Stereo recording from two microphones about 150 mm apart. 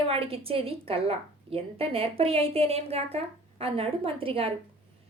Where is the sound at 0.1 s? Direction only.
40° right (ahead or behind).